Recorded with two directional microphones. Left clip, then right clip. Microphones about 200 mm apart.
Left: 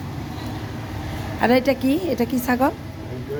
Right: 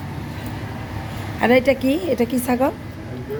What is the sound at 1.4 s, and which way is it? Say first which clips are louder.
Speech: right 2 dB; 5° right (ahead or behind).